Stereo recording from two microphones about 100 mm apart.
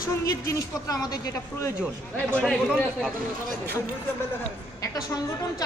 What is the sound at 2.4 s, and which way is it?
Speech, 5° left (ahead or behind).